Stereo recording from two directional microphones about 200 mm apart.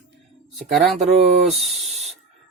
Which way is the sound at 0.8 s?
35° right (ahead or behind).